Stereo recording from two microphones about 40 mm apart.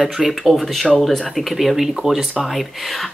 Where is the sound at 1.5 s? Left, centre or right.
Centre.